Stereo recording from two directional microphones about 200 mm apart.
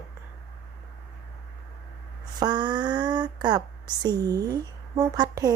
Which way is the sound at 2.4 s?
20° right (ahead or behind).